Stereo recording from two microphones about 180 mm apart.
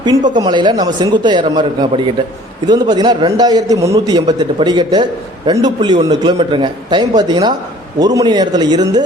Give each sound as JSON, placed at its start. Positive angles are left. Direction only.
{"t": 0.0, "sound": "speech", "side_deg": -25}